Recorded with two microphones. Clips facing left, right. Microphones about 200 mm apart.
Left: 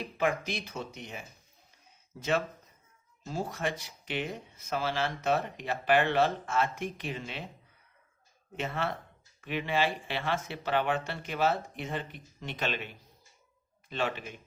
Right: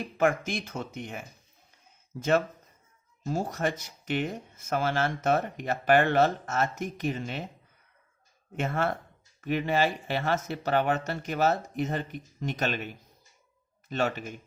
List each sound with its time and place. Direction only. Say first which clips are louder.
0.2 s speech: right 4 dB; 50° right (ahead or behind)
3.2 s speech: right 4 dB; 45° right (ahead or behind)
8.5 s speech: right 5 dB; 50° right (ahead or behind)